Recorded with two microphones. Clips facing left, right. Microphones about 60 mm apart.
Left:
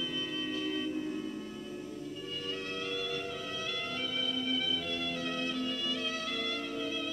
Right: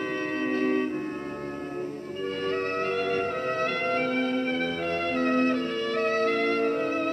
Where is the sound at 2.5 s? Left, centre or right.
Right.